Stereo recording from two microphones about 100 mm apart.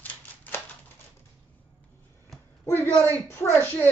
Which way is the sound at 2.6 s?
25° left (ahead or behind).